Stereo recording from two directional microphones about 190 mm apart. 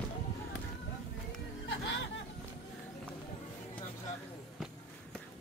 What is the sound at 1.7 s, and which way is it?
Music, 75° left (ahead or behind).